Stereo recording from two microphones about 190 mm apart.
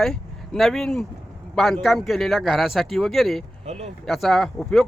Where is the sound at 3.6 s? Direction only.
35° right (ahead or behind).